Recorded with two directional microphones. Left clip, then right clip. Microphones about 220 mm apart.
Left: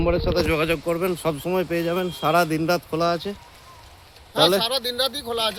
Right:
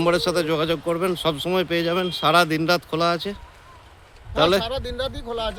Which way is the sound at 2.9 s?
15° right (ahead or behind).